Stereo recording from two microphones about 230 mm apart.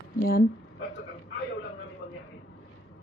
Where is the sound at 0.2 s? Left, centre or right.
Left.